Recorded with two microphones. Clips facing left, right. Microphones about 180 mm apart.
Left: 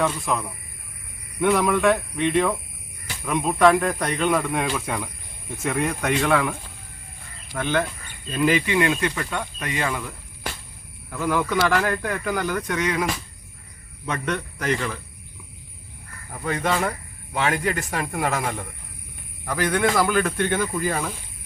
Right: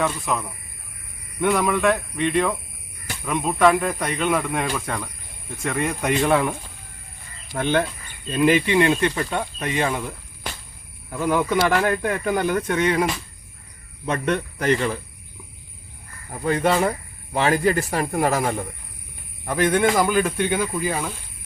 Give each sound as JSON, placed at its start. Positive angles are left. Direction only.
{"t": 0.0, "sound": "speech", "side_deg": 0}
{"t": 6.2, "sound": "speech", "side_deg": -25}
{"t": 7.5, "sound": "speech", "side_deg": -30}
{"t": 11.1, "sound": "speech", "side_deg": -20}
{"t": 16.3, "sound": "speech", "side_deg": -35}
{"t": 19.5, "sound": "speech", "side_deg": -25}